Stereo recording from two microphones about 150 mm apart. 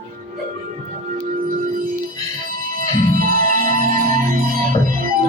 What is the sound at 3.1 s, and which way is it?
Music, 70° right (ahead or behind).